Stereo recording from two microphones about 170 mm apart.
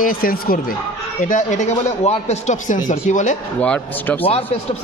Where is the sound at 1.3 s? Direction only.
45° left (ahead or behind).